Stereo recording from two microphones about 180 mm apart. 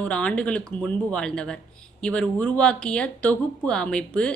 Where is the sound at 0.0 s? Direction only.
5° left (ahead or behind).